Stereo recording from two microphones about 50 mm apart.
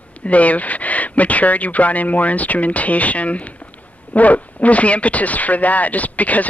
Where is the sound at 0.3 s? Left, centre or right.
Left.